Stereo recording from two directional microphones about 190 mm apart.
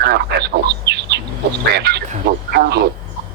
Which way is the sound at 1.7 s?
60° right (ahead or behind).